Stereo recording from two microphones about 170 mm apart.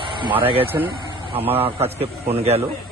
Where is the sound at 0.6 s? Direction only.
10° right (ahead or behind).